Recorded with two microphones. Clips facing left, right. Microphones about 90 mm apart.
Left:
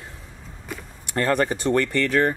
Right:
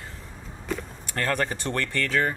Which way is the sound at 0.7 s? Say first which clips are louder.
Right 5 dB; 5° left (ahead or behind).